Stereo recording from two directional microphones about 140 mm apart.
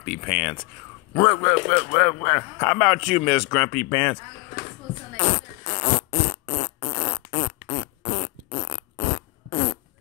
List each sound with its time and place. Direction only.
0.0 s speech: centre (ahead or behind)
1.1 s speech: 20° left (ahead or behind)
1.7 s speech: 45° left (ahead or behind)
2.2 s speech: 10° left (ahead or behind)
3.9 s speech: 15° left (ahead or behind)
5.2 s zipper: 35° left (ahead or behind)
6.2 s fart: 35° left (ahead or behind)
8.5 s fart: 25° left (ahead or behind)